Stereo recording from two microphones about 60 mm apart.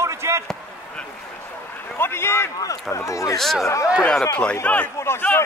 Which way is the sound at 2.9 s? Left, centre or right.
Left.